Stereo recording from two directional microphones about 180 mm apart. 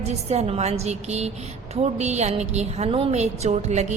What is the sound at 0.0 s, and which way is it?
A woman's voice, 35° right (ahead or behind).